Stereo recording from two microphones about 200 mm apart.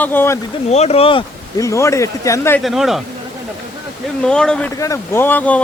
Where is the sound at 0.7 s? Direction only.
30° left (ahead or behind).